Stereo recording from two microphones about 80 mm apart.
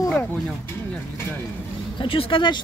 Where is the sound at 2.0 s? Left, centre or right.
Left.